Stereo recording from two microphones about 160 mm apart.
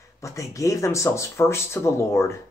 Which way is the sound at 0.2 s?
20° left (ahead or behind).